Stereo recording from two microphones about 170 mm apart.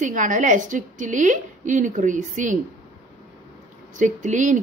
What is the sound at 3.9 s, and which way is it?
Speech, 45° right (ahead or behind).